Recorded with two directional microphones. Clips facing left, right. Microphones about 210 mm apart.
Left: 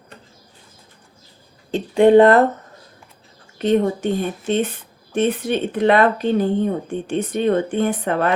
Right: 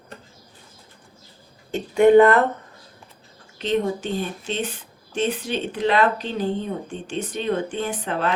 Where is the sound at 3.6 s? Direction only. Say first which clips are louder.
Left 5 dB; 55° left (ahead or behind).